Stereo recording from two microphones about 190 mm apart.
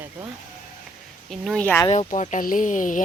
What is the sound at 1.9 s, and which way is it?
Speech, 35° left (ahead or behind).